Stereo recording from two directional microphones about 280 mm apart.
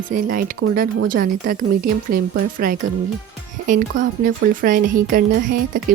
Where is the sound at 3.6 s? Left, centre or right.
Right.